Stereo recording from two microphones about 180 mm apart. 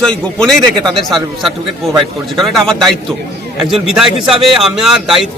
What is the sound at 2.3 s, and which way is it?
A man's voice, centre (ahead or behind).